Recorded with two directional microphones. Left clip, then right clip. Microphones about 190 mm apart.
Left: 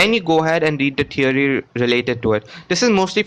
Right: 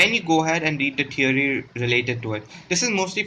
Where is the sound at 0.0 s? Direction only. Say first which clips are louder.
Left 3 dB; 40° left (ahead or behind).